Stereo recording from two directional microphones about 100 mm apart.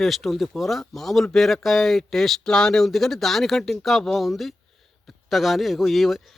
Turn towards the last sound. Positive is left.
turn(degrees=0)  # may be behind; listen again after turning